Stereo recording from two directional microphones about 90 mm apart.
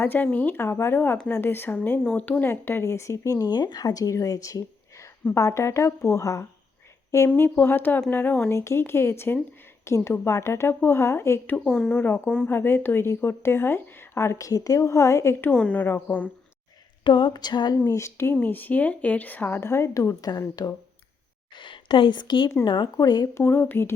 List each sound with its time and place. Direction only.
0.0 s a woman's voice: 20° left (ahead or behind)
7.3 s a woman's voice: 20° left (ahead or behind)
8.4 s a woman's voice: 30° left (ahead or behind)
11.6 s speech: 5° left (ahead or behind)
12.0 s a woman's voice: 20° left (ahead or behind)
15.4 s speech: 15° left (ahead or behind)
17.0 s a sound: 55° left (ahead or behind)
17.7 s speech: 30° left (ahead or behind)
18.3 s a woman's voice: 20° left (ahead or behind); by 20.4 s 40° left (ahead or behind)
21.5 s speech: 65° left (ahead or behind); by 23.3 s 50° left (ahead or behind)
23.3 s a woman's voice: 25° left (ahead or behind)